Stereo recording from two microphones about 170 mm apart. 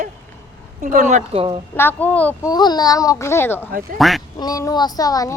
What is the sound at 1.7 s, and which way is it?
Speech, 10° left (ahead or behind).